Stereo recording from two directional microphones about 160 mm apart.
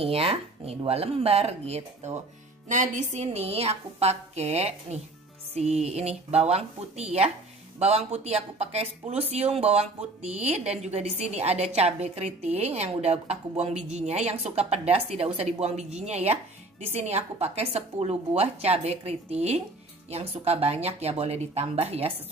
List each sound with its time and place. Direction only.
0.0 s a woman's voice: 35° right (ahead or behind)